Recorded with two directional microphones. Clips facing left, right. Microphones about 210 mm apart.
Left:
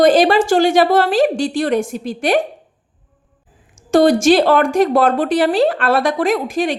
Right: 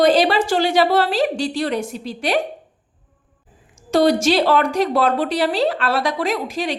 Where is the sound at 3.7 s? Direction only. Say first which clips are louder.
Left 4 dB; 50° left (ahead or behind).